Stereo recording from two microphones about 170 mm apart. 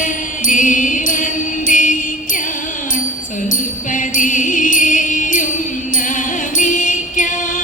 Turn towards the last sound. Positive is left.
turn(degrees=50)  # may be behind; listen again after turning